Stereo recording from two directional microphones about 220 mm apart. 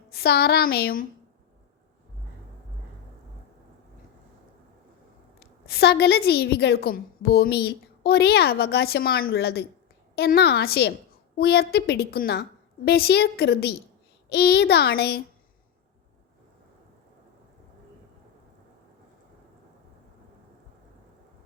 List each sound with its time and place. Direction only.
0.1 s a woman's voice: 45° left (ahead or behind)
5.4 s a woman's voice: 45° left (ahead or behind)